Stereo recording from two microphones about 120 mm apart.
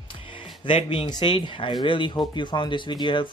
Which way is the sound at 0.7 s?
45° left (ahead or behind).